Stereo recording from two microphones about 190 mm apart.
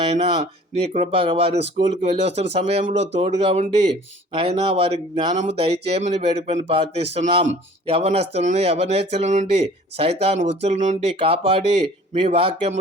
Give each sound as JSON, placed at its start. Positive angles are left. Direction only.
{"t": 0.7, "sound": "speech", "side_deg": -35}
{"t": 2.8, "sound": "speech", "side_deg": -70}
{"t": 3.2, "sound": "speech", "side_deg": -30}